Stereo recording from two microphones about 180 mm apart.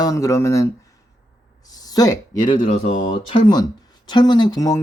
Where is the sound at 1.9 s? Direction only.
20° left (ahead or behind).